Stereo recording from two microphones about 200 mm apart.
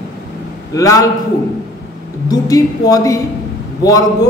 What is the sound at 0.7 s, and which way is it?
Speech, 15° left (ahead or behind).